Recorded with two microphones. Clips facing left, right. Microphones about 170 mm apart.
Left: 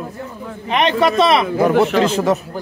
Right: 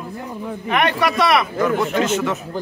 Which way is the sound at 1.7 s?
85° left.